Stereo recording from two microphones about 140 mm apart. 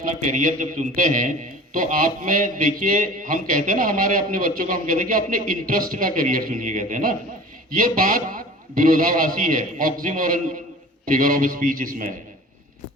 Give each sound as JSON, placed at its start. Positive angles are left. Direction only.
{"t": 0.3, "sound": "a man's voice", "side_deg": -65}
{"t": 7.8, "sound": "a man's voice", "side_deg": -90}
{"t": 11.0, "sound": "a man's voice", "side_deg": -85}